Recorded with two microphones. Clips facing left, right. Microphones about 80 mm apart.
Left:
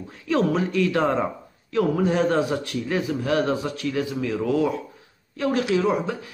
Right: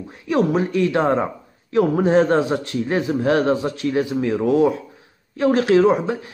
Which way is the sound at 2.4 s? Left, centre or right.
Right.